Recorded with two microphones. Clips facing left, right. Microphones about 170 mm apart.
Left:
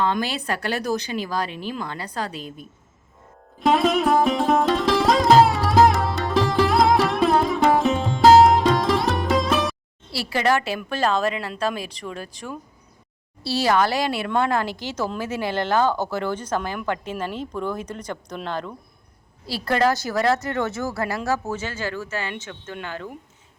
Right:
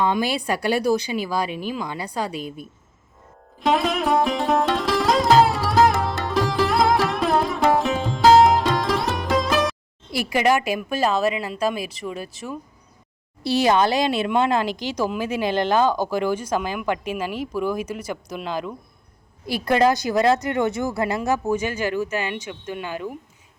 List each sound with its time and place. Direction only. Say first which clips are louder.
0.0 s speech: right 2 dB; 10° right (ahead or behind)
3.6 s sitar: left 2 dB; centre (ahead or behind)
10.1 s speech: right 2 dB; 15° right (ahead or behind)
13.4 s speech: right 2 dB; 15° right (ahead or behind)